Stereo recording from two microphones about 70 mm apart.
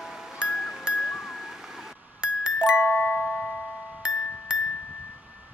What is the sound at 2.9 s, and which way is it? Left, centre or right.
Music, left.